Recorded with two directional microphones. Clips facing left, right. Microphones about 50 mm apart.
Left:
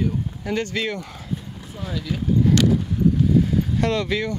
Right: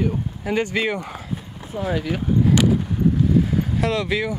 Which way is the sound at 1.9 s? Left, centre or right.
Right.